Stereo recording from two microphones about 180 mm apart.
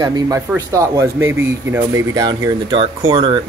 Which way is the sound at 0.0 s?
20° right (ahead or behind).